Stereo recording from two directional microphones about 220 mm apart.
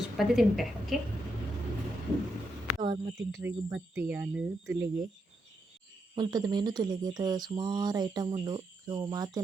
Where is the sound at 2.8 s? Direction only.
20° right (ahead or behind).